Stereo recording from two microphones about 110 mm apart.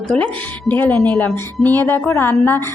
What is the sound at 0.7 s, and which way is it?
A woman's voice, 20° left (ahead or behind).